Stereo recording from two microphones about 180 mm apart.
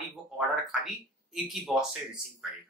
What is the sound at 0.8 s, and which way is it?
Speech, centre (ahead or behind).